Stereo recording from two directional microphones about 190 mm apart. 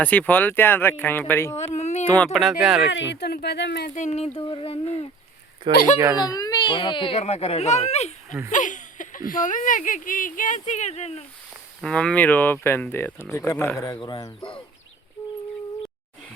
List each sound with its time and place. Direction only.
0.0 s speech: 10° left (ahead or behind)
1.5 s a child's voice: 35° left (ahead or behind)
2.0 s speech: 5° left (ahead or behind)
2.9 s speech: 70° left (ahead or behind)
3.9 s a child's voice: 35° left (ahead or behind)
4.4 s a sound: 30° left (ahead or behind)
5.7 s speech: 45° left (ahead or behind)
6.1 s a child's voice: 20° left (ahead or behind)
11.8 s speech: 5° left (ahead or behind); by 14.5 s 20° left (ahead or behind)